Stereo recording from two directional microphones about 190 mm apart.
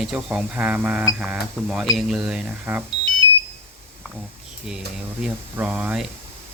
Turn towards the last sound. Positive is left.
turn(degrees=-5)  # may be behind; listen again after turning